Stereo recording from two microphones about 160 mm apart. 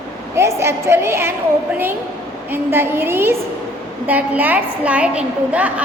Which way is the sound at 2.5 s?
15° right (ahead or behind).